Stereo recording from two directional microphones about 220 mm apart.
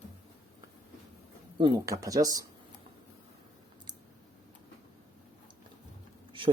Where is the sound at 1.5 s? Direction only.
15° right (ahead or behind).